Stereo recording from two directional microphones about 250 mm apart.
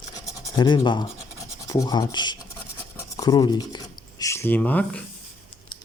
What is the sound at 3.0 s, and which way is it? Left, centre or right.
Filing, centre.